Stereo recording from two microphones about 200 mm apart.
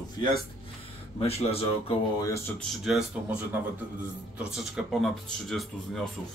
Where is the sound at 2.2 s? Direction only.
15° left (ahead or behind).